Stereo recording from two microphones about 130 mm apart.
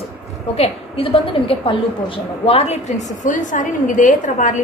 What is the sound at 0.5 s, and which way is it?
A woman's voice, 50° left (ahead or behind).